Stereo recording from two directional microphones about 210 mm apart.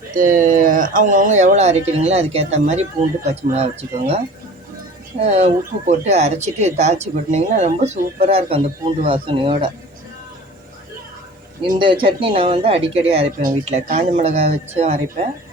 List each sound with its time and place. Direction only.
0.1 s speech: 40° right (ahead or behind)
5.2 s speech: 30° right (ahead or behind)
11.7 s speech: 25° right (ahead or behind)